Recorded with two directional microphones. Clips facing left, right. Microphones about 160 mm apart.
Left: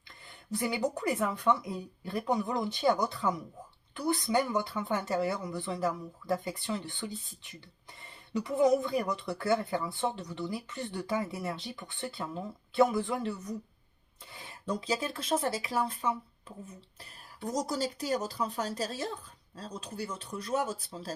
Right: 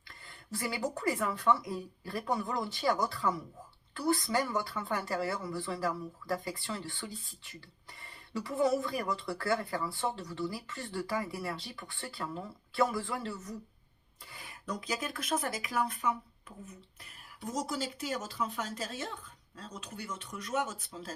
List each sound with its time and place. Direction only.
0.3 s speech: 20° left (ahead or behind)